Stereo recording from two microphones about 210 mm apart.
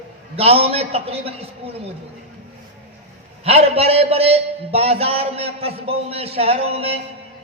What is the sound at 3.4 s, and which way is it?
A man's voice, 30° right (ahead or behind).